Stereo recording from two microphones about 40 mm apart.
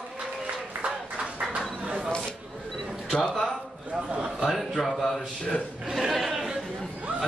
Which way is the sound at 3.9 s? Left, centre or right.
Right.